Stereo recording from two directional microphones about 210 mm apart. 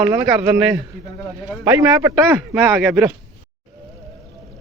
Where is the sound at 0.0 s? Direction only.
10° right (ahead or behind).